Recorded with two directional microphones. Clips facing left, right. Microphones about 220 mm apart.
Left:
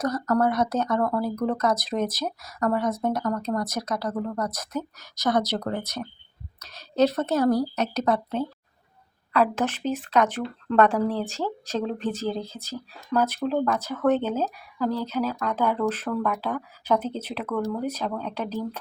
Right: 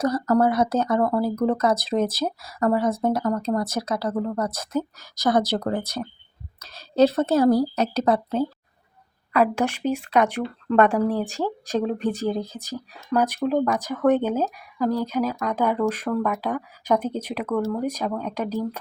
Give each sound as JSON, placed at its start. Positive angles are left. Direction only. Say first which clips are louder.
{"t": 0.0, "sound": "a woman's voice", "louder": "right 3 dB", "side_deg": -30}
{"t": 9.3, "sound": "speech", "louder": "right 2 dB", "side_deg": -10}